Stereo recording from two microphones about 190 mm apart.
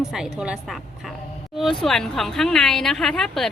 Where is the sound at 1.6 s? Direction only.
Centre (ahead or behind).